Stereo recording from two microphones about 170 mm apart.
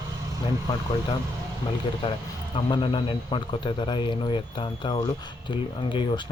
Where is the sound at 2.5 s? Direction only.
30° left (ahead or behind).